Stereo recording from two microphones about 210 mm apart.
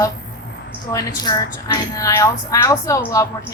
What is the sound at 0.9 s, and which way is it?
A woman's voice, 15° left (ahead or behind).